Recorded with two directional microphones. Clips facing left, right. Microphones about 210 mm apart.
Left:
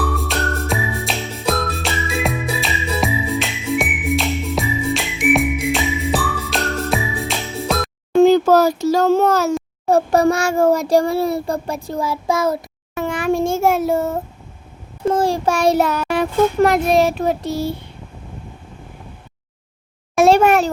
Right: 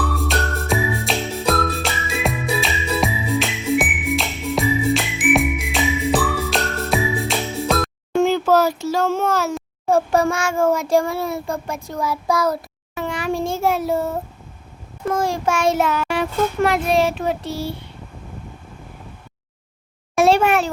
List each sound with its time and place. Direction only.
0.2 s music: centre (ahead or behind)
8.2 s a sound: 40° left (ahead or behind)
9.9 s child singing: 40° left (ahead or behind)
12.9 s a sound: 50° left (ahead or behind)
15.0 s a child's voice: 30° left (ahead or behind)
20.2 s a child's voice: 40° left (ahead or behind)